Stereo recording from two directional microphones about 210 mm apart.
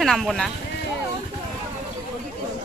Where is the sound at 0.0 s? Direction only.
Centre (ahead or behind).